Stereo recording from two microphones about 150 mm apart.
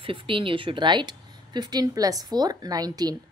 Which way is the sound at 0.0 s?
35° right (ahead or behind).